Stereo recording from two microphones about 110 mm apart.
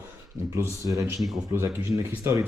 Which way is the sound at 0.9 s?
30° right (ahead or behind).